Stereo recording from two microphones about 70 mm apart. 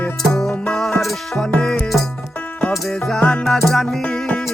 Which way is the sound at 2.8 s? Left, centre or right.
Centre.